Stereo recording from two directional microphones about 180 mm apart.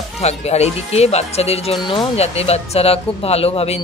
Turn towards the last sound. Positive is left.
turn(degrees=35)  # may be behind; listen again after turning